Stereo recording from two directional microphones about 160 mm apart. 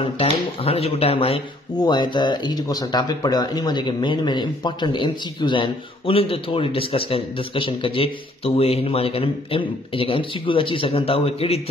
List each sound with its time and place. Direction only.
0.0 s speech: 35° left (ahead or behind)
1.8 s speech: 25° left (ahead or behind)